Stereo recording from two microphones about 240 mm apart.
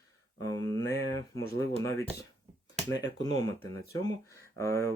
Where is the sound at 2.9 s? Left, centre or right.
Centre.